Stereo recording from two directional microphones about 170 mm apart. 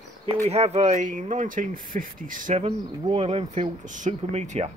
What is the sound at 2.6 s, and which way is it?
Speech, 35° right (ahead or behind).